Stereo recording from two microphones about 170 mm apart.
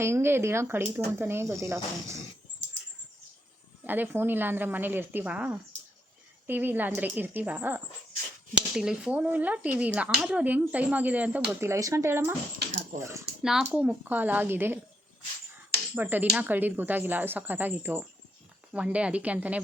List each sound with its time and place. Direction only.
0.0 s speech: 15° right (ahead or behind)
3.8 s speech: 10° right (ahead or behind)
13.4 s speech: 5° right (ahead or behind)
16.0 s speech: 10° right (ahead or behind)